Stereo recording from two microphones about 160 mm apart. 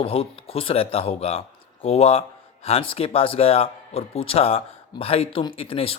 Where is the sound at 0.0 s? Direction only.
35° left (ahead or behind).